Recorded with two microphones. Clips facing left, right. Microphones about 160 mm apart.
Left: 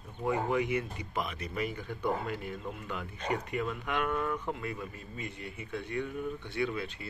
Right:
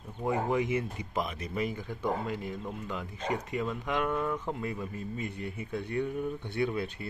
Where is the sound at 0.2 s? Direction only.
25° right (ahead or behind).